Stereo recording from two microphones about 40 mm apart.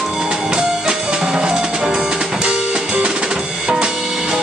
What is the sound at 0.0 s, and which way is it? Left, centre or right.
Music, centre.